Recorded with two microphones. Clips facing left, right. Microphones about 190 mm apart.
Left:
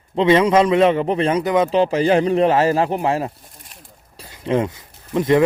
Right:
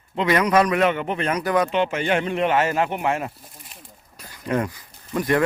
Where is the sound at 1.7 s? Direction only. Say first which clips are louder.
Left 6 dB; 35° left (ahead or behind).